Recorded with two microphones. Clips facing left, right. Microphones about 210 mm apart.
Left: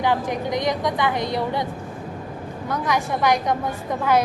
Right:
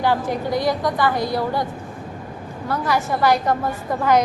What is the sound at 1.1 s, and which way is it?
Speech, 20° left (ahead or behind).